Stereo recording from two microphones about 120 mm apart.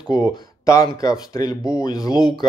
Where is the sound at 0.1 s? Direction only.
30° left (ahead or behind).